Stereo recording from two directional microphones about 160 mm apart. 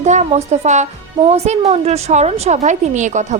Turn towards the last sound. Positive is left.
turn(degrees=-50)  # may be behind; listen again after turning